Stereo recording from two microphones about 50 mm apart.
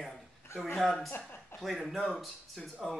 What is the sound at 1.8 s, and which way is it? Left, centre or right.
Speech, centre.